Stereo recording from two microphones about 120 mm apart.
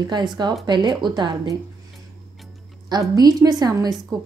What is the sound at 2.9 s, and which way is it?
A woman's voice, 35° right (ahead or behind).